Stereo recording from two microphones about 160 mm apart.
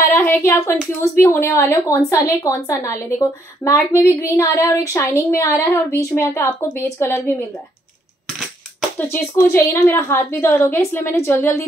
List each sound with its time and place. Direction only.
0.0 s a woman's voice: 15° left (ahead or behind)
8.9 s a woman's voice: 10° left (ahead or behind)